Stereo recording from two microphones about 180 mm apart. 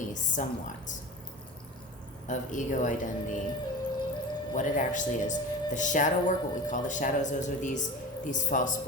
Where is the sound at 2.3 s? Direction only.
45° left (ahead or behind).